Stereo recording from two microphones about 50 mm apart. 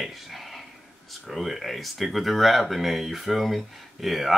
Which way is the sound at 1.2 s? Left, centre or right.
Centre.